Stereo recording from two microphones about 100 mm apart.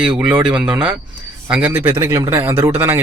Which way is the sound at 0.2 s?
10° right (ahead or behind).